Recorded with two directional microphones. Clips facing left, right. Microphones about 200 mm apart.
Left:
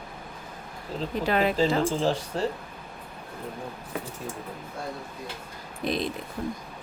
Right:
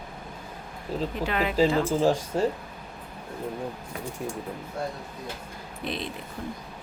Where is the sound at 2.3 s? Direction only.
10° right (ahead or behind).